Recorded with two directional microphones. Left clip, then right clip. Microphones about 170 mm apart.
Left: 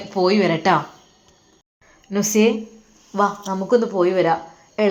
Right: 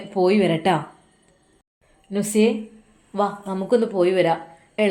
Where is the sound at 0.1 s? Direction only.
5° right (ahead or behind).